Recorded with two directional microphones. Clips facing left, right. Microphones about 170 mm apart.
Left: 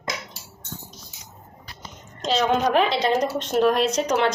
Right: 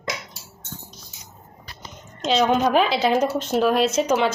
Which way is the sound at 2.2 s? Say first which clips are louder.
Right 2 dB; centre (ahead or behind).